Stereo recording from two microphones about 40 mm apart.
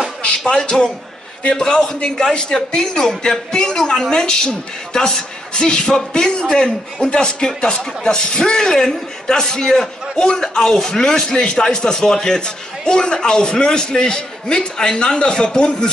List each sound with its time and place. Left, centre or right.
0.5 s a woman's voice: left